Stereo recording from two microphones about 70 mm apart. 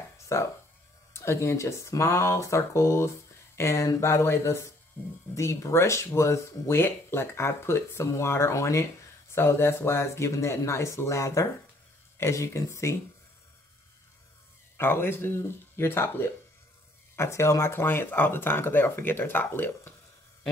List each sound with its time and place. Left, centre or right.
0.2 s a sound: left
1.1 s speech: left
5.0 s speech: left
5.3 s speech: left
14.8 s speech: left